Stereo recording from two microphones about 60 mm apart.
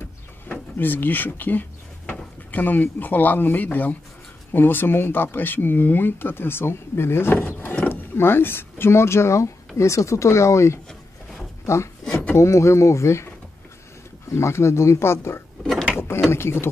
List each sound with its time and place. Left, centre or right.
0.5 s speech: left
14.3 s speech: left